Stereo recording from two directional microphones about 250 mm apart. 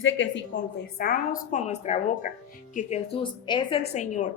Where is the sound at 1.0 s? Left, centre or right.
Left.